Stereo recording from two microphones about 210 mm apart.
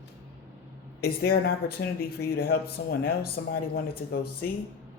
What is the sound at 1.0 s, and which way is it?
Speech, 45° left (ahead or behind).